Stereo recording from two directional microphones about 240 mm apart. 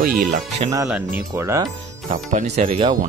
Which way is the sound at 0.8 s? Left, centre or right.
Centre.